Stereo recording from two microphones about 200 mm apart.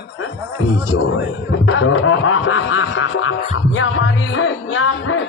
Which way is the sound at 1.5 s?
90° left.